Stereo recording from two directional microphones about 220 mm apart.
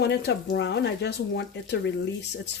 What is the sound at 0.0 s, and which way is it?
Speech, 50° left (ahead or behind).